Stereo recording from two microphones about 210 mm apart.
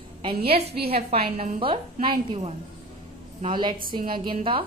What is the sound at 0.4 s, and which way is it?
Speech, 50° right (ahead or behind).